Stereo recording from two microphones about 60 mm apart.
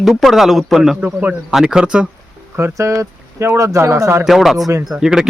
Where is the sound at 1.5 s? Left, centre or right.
Centre.